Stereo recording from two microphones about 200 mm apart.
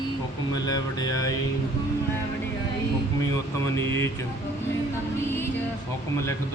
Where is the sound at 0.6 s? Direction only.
20° left (ahead or behind).